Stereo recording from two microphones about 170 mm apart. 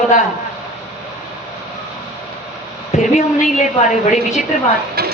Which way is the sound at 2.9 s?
40° left (ahead or behind).